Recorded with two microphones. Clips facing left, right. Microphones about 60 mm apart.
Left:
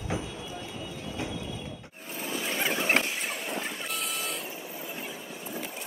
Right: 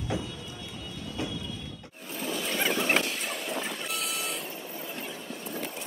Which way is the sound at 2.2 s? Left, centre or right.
Centre.